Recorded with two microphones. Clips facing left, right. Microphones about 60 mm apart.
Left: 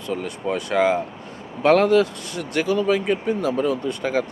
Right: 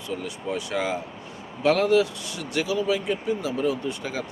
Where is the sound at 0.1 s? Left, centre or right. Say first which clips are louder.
Left 5 dB; left.